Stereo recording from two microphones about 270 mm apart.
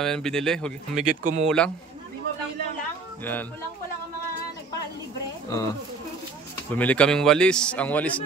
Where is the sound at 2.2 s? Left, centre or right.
Right.